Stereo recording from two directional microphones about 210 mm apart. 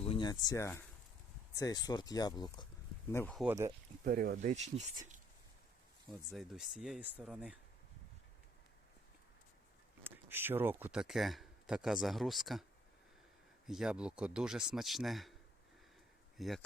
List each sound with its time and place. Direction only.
0.0 s speech: 25° left (ahead or behind)
3.3 s speech: 10° right (ahead or behind)
4.0 s speech: 45° right (ahead or behind)
6.3 s a man's voice: centre (ahead or behind)
10.0 s speech: 10° right (ahead or behind)
13.7 s a man's voice: 5° right (ahead or behind)
16.4 s a man's voice: centre (ahead or behind)